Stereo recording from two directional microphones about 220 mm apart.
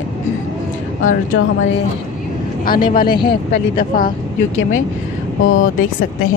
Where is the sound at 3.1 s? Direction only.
20° left (ahead or behind).